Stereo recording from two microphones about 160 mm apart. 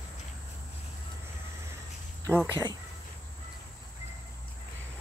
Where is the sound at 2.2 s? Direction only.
15° right (ahead or behind).